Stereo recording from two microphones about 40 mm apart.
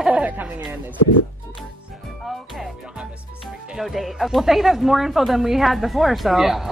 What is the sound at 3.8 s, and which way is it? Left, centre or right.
A woman's voice, centre.